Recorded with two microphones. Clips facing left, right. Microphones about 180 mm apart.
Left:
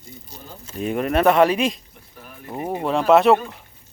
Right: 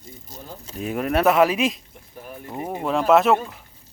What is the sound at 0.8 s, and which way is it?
A man's voice, centre (ahead or behind).